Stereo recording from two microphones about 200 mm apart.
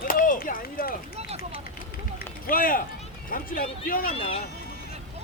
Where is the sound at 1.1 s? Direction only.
30° right (ahead or behind).